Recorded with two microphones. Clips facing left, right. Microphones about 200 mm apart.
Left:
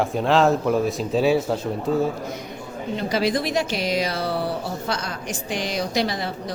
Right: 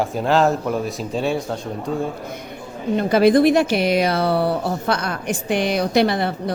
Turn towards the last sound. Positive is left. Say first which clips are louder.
# right 6 dB
turn(degrees=-60)  # may be behind; listen again after turning